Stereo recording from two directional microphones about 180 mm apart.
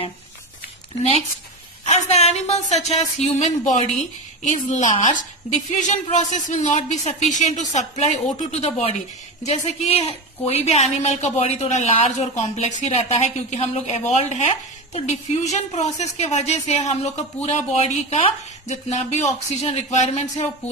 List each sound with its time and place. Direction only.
1.9 s a woman's voice: 35° left (ahead or behind)